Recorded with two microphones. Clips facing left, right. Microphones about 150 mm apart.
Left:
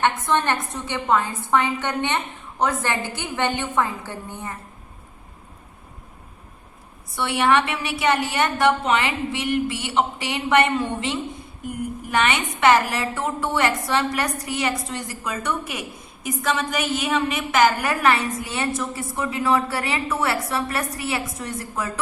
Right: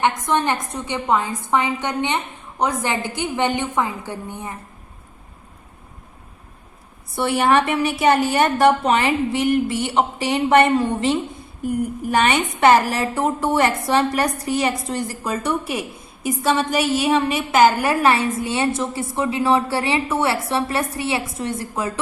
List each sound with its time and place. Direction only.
0.0 s a woman's voice: 15° right (ahead or behind)
7.2 s a woman's voice: 40° right (ahead or behind)